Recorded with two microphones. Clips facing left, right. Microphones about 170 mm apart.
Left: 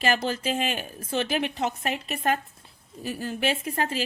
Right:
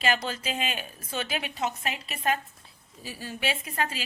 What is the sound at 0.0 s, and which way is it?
A woman's voice, 50° left (ahead or behind).